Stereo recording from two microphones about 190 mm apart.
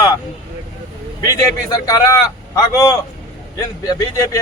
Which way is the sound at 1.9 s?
15° left (ahead or behind).